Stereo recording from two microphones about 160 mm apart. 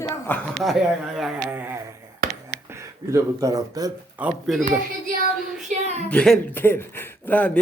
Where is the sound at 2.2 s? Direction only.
65° right (ahead or behind).